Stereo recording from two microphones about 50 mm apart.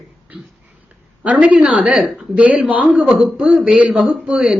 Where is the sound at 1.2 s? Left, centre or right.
Right.